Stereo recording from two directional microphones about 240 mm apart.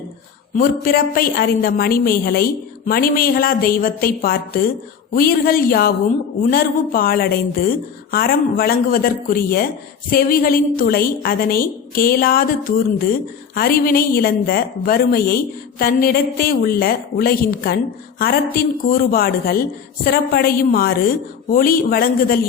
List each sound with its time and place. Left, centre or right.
0.5 s a woman's voice: left